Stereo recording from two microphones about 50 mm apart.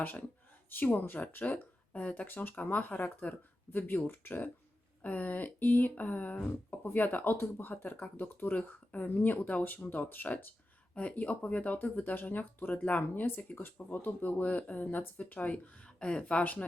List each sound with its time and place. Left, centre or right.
0.0 s speech: left
16.4 s speech: left